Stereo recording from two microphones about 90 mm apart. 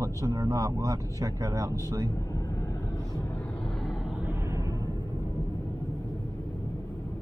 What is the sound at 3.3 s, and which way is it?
Vehicle, 10° left (ahead or behind).